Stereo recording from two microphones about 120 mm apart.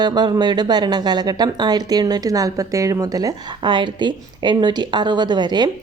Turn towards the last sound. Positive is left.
turn(degrees=-35)  # may be behind; listen again after turning